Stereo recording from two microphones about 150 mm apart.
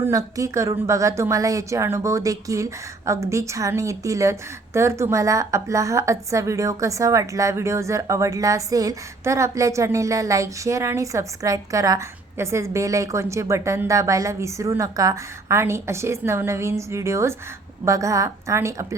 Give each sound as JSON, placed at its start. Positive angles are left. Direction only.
{"t": 0.0, "sound": "a woman's voice", "side_deg": -20}